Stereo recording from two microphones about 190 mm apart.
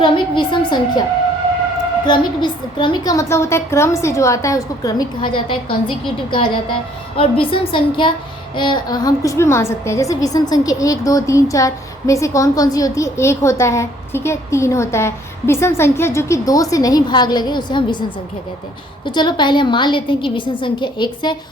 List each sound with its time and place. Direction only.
0.0 s a woman's voice: 25° left (ahead or behind)
2.0 s a woman's voice: 25° left (ahead or behind)
7.2 s a woman's voice: 30° left (ahead or behind)
19.0 s a woman's voice: 25° left (ahead or behind)